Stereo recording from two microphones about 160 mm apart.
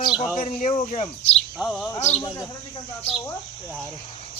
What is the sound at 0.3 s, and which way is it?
Speech, 50° left (ahead or behind).